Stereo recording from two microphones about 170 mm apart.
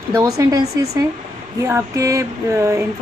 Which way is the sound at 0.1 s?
20° right (ahead or behind).